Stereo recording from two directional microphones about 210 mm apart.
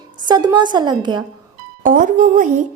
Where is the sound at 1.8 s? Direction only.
40° right (ahead or behind).